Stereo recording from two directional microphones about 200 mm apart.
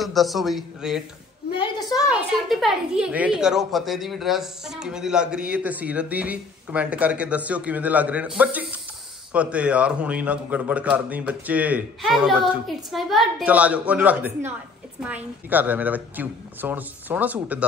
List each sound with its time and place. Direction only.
0.0 s a woman's voice: centre (ahead or behind)
1.5 s a sound: 20° left (ahead or behind)
2.0 s a woman's voice: centre (ahead or behind)